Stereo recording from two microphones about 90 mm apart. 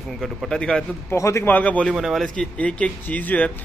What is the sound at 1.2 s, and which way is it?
Speech, 35° left (ahead or behind).